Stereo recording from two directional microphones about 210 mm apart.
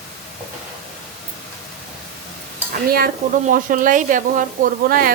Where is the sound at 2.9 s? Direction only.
45° right (ahead or behind).